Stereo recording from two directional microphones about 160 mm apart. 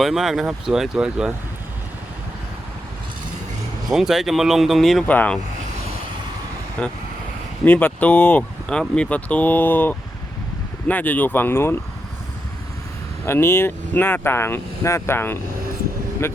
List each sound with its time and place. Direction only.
0.0 s speech: centre (ahead or behind)
3.8 s speech: centre (ahead or behind)
6.8 s speech: 5° left (ahead or behind)
13.2 s speech: 15° left (ahead or behind)